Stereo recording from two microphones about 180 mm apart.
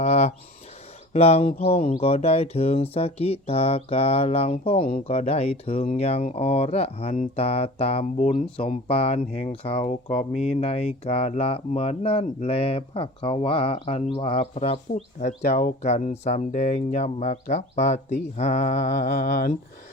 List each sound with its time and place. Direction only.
0.0 s speech: 35° left (ahead or behind)
18.9 s mantra: 55° left (ahead or behind)